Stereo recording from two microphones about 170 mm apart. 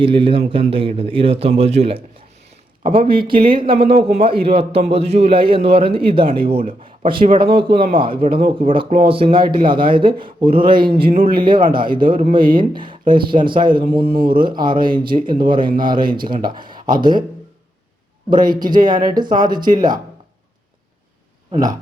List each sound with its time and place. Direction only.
0.0 s a man's voice: 30° right (ahead or behind)
2.5 s a sound: 35° right (ahead or behind)
3.4 s a man's voice: 30° right (ahead or behind)
3.7 s speech: 65° right (ahead or behind)
3.9 s a man's voice: 35° right (ahead or behind)
12.0 s speech: 55° right (ahead or behind)
12.5 s speech: 30° right (ahead or behind)
18.3 s speech: 25° right (ahead or behind)
21.5 s speech: 25° right (ahead or behind)